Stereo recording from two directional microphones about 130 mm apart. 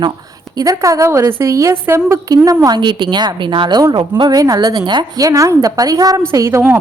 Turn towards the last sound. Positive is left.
turn(degrees=-20)  # may be behind; listen again after turning